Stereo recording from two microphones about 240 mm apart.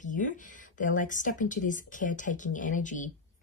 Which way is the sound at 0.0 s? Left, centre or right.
Left.